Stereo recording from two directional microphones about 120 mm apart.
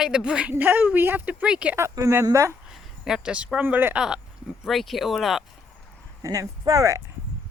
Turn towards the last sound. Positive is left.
turn(degrees=-25)  # may be behind; listen again after turning